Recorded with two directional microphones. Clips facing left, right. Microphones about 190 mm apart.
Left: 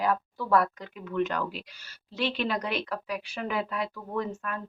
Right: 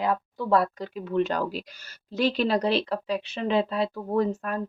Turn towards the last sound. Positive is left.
turn(degrees=-40)  # may be behind; listen again after turning